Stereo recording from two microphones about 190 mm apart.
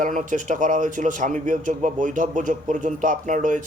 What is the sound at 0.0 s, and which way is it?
Speech, 40° right (ahead or behind).